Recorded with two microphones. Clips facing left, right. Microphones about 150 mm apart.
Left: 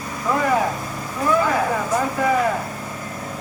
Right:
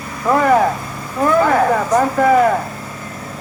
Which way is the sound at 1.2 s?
60° right (ahead or behind).